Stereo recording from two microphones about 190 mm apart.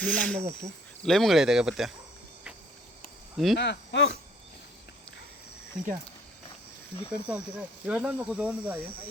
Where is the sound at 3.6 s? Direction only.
70° left (ahead or behind).